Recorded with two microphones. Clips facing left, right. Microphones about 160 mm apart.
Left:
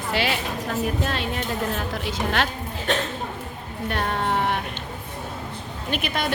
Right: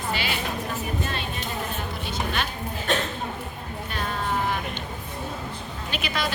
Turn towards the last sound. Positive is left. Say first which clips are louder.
# left 3 dB
turn(degrees=55)  # may be behind; listen again after turning